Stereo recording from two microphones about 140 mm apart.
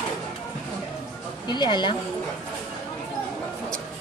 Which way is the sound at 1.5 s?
35° left (ahead or behind).